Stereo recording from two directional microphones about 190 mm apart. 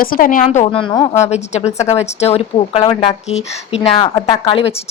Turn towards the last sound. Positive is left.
turn(degrees=25)  # may be behind; listen again after turning